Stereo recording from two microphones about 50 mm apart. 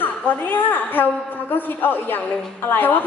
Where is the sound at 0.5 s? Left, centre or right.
Left.